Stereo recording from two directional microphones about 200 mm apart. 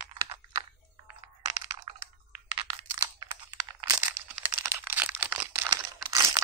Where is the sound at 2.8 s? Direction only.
20° right (ahead or behind).